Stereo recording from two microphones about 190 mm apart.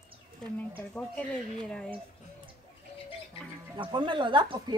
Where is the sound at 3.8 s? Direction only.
25° right (ahead or behind).